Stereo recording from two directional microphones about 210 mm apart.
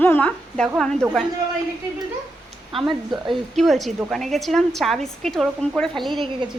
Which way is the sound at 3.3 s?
Centre (ahead or behind).